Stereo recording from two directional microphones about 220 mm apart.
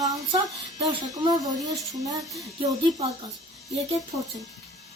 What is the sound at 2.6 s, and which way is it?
Speech, 15° right (ahead or behind).